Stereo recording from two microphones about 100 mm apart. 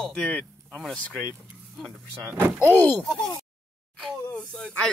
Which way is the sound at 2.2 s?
20° right (ahead or behind).